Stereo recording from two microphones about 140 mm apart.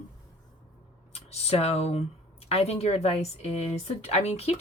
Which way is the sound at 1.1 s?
50° left (ahead or behind).